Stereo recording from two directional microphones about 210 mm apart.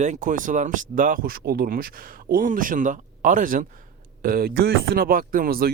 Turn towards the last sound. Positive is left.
turn(degrees=-45)  # may be behind; listen again after turning